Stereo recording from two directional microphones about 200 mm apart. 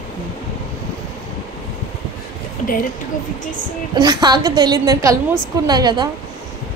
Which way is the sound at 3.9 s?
20° right (ahead or behind).